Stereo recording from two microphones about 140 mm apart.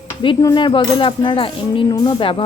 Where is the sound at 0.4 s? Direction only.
35° left (ahead or behind).